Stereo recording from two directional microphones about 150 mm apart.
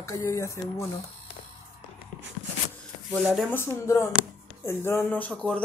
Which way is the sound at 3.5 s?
15° left (ahead or behind).